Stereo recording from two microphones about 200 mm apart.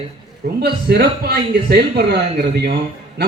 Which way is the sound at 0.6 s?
55° right (ahead or behind).